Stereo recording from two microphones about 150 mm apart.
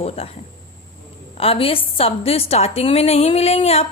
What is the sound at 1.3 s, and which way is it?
A woman's voice, 40° left (ahead or behind).